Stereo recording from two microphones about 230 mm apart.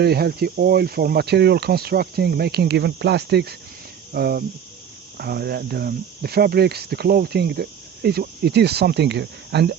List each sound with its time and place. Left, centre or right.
0.0 s speech: right